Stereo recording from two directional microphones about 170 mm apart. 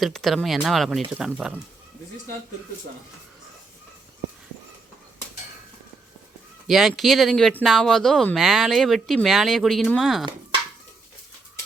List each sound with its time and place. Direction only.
0.0 s speech: centre (ahead or behind)
6.7 s speech: centre (ahead or behind)